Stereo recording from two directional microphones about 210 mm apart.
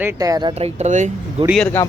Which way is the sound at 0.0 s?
15° right (ahead or behind).